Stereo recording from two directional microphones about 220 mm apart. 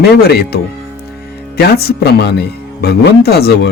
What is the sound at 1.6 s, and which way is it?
Speech, 45° left (ahead or behind).